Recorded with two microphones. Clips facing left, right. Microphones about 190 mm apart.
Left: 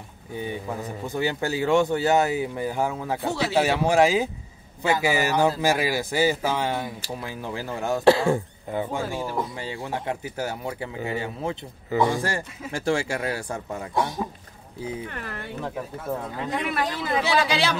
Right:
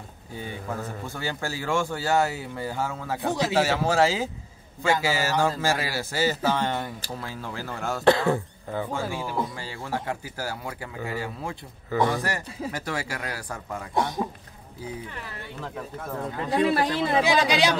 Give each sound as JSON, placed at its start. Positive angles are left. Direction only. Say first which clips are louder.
{"t": 0.3, "sound": "a man's voice", "louder": "left 3 dB", "side_deg": 15}
{"t": 3.2, "sound": "speech", "louder": "right 4 dB", "side_deg": -15}
{"t": 3.5, "sound": "a man's voice", "louder": "left 4 dB", "side_deg": 15}
{"t": 15.0, "sound": "speech", "louder": "left 4 dB", "side_deg": 55}
{"t": 16.4, "sound": "speech", "louder": "right 5 dB", "side_deg": -35}
{"t": 17.2, "sound": "speech", "louder": "even", "side_deg": -15}